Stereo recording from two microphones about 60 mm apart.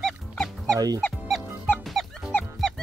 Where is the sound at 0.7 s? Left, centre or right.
Right.